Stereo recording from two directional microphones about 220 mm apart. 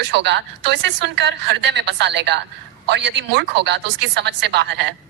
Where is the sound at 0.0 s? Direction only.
50° right (ahead or behind).